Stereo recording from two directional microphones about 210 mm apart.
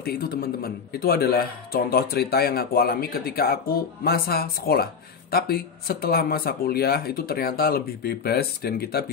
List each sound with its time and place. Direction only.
0.0 s a man's voice: 45° left (ahead or behind)